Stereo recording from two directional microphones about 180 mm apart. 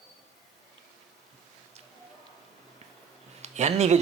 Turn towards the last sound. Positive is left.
turn(degrees=-40)  # may be behind; listen again after turning